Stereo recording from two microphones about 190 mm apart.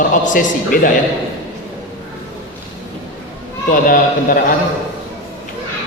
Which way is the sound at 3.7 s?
50° left (ahead or behind).